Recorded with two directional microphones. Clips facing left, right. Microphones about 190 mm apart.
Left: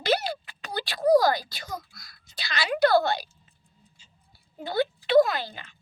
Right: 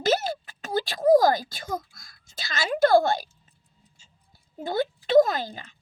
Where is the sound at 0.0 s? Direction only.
45° right (ahead or behind).